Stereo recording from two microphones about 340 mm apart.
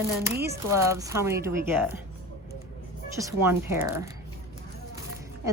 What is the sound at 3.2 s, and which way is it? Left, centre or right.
Speech, centre.